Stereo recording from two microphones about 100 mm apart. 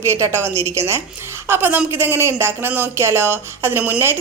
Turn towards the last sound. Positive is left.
turn(degrees=-20)  # may be behind; listen again after turning